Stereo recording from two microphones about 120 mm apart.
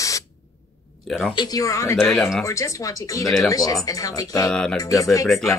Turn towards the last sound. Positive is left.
turn(degrees=0)  # may be behind; listen again after turning